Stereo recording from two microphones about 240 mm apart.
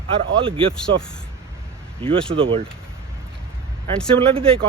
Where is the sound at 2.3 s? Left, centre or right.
Right.